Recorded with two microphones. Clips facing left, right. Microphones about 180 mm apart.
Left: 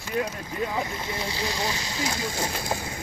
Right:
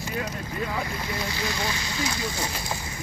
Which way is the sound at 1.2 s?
30° left (ahead or behind).